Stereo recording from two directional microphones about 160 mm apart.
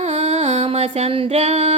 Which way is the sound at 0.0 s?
40° right (ahead or behind).